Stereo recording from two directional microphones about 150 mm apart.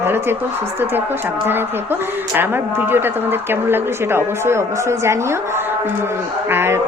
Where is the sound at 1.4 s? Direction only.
15° right (ahead or behind).